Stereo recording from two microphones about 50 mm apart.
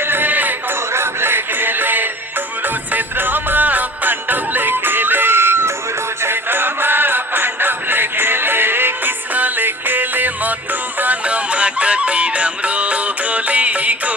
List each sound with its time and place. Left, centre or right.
0.1 s music: right
0.9 s music: right